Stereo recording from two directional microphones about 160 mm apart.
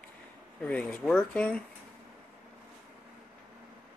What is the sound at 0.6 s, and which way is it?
Speech, 10° left (ahead or behind).